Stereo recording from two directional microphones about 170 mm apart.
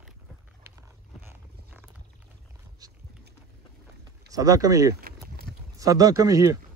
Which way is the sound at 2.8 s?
20° right (ahead or behind).